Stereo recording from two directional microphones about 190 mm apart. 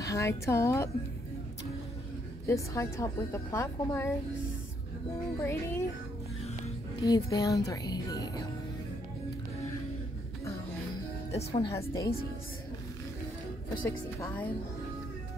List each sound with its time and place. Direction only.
0.0 s a woman's voice: 15° left (ahead or behind)
2.4 s a woman's voice: 15° left (ahead or behind)
5.4 s a woman's voice: 15° left (ahead or behind)
7.0 s speech: 20° left (ahead or behind)
11.7 s a woman's voice: 15° left (ahead or behind)
13.8 s a woman's voice: 10° left (ahead or behind)